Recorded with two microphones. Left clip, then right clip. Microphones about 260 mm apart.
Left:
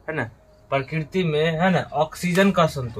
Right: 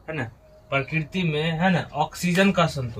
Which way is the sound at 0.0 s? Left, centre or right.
Centre.